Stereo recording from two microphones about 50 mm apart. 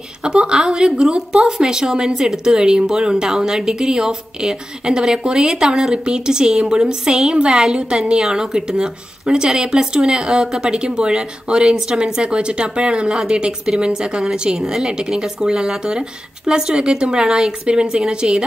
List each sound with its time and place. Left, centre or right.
0.2 s a woman's voice: centre